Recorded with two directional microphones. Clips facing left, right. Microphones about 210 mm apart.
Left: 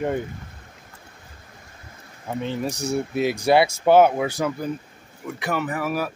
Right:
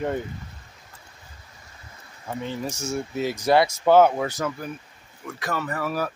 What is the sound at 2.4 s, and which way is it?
Speech, 20° left (ahead or behind).